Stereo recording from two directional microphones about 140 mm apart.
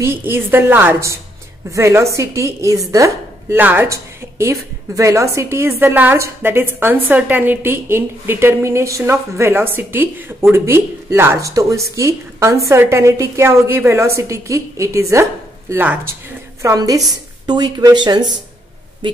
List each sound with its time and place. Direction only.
0.0 s a woman's voice: 15° right (ahead or behind)
1.7 s chopping: 20° right (ahead or behind)
15.7 s a woman's voice: 15° right (ahead or behind)
16.6 s chopping: 25° right (ahead or behind)
17.5 s speech: 30° right (ahead or behind)